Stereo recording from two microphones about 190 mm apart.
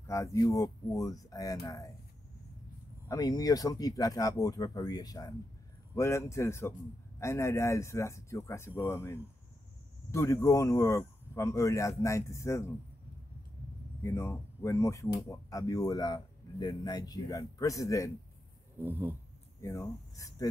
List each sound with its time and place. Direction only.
0.0 s speech: 15° left (ahead or behind)
3.1 s speech: 20° left (ahead or behind)
14.0 s speech: 15° left (ahead or behind)
18.8 s a sound: 10° right (ahead or behind)
19.6 s speech: 15° left (ahead or behind)